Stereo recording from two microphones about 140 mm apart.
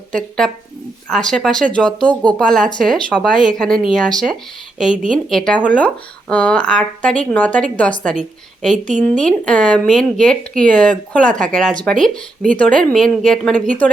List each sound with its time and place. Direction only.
0.1 s speech: 5° left (ahead or behind)
8.8 s speech: 60° right (ahead or behind)
9.2 s speech: 5° left (ahead or behind)